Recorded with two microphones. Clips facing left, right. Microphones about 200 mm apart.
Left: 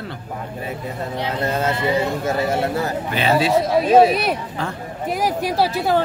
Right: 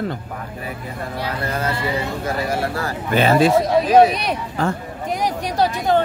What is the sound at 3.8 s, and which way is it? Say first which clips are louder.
Speech: even; 25° left (ahead or behind).